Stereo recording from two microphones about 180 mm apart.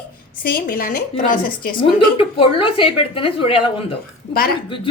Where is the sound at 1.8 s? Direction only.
30° left (ahead or behind).